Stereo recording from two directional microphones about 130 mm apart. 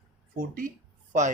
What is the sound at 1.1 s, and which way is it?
Speech, 70° right (ahead or behind).